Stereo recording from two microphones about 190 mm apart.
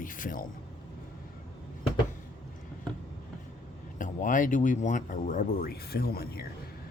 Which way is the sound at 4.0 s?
45° left (ahead or behind).